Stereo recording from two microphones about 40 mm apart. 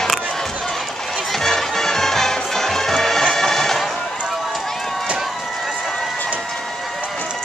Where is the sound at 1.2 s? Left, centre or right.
Centre.